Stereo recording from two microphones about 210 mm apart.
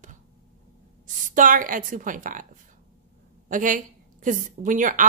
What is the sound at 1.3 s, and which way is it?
A woman's voice, 40° right (ahead or behind).